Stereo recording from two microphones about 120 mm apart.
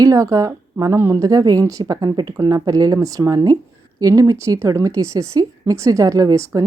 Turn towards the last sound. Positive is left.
turn(degrees=-25)  # may be behind; listen again after turning